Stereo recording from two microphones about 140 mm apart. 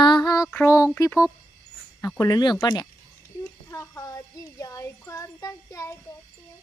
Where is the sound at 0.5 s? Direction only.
20° left (ahead or behind).